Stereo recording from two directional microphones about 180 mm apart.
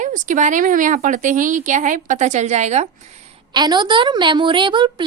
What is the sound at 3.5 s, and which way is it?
A woman's voice, 25° right (ahead or behind).